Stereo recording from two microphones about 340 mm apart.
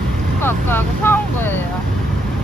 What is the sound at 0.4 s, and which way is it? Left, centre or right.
Speech, centre.